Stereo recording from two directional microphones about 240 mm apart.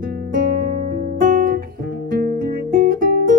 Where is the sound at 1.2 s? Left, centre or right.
Right.